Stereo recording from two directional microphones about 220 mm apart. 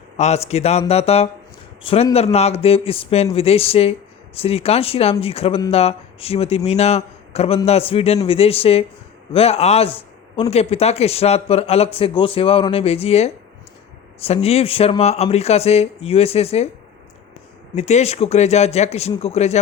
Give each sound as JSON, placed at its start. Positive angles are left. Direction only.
{"t": 0.2, "sound": "speech", "side_deg": 30}
{"t": 17.7, "sound": "speech", "side_deg": 30}